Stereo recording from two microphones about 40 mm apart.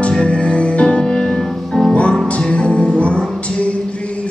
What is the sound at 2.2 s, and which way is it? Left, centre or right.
Music, left.